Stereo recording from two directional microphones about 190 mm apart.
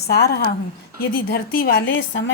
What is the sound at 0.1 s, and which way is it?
A woman's voice, 60° left (ahead or behind).